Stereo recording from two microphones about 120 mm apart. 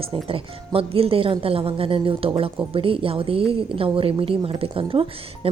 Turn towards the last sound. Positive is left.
turn(degrees=-50)  # may be behind; listen again after turning